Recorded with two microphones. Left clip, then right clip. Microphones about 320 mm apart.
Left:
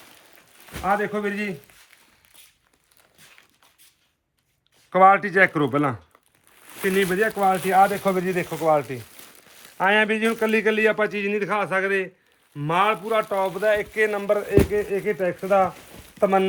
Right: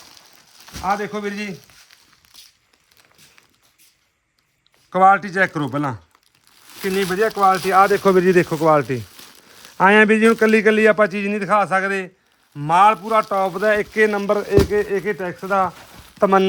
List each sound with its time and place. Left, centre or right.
0.9 s a man's voice: centre
2.2 s a sound: centre
4.9 s a man's voice: centre